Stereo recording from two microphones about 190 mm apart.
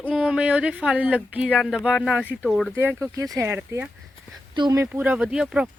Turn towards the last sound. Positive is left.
turn(degrees=-5)  # may be behind; listen again after turning